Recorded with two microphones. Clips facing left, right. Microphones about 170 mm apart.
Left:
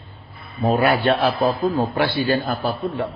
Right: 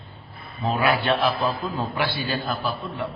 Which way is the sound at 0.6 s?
45° left (ahead or behind).